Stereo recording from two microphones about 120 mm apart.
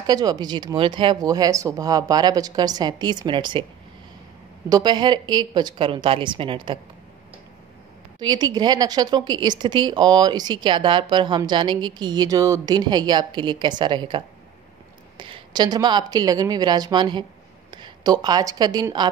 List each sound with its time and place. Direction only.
0.0 s a woman's voice: 35° right (ahead or behind)
4.6 s a woman's voice: 35° right (ahead or behind)
8.2 s a woman's voice: 35° right (ahead or behind)